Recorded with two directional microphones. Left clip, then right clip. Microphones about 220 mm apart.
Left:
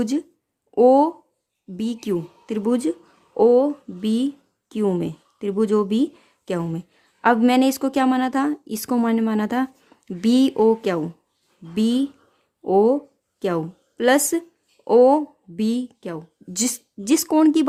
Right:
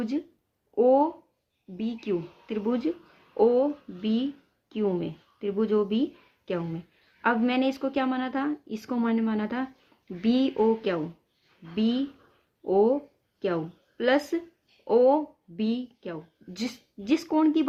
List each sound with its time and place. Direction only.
0.0 s speech: 50° left (ahead or behind)